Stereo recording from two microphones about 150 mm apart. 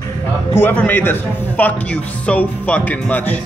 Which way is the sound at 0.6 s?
15° left (ahead or behind).